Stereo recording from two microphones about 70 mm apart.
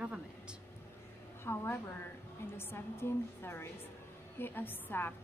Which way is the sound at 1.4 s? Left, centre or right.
Left.